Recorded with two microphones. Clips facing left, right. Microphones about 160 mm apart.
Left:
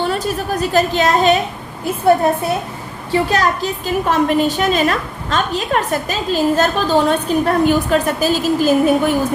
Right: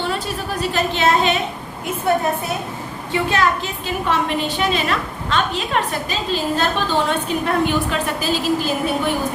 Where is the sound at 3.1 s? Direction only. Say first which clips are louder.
Left 3 dB; 40° left (ahead or behind).